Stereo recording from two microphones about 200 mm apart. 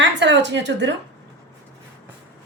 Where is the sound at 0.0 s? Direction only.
60° right (ahead or behind).